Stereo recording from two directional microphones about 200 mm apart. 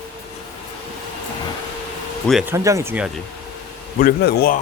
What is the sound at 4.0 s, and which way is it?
Speech, 50° left (ahead or behind).